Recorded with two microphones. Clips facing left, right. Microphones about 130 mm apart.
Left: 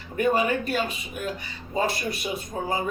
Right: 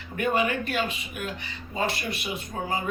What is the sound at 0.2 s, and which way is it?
Speech, 35° left (ahead or behind).